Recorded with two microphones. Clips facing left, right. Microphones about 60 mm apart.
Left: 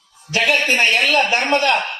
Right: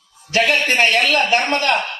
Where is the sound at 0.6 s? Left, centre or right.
Right.